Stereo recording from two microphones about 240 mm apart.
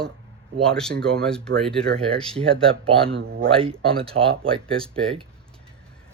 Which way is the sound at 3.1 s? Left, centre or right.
Right.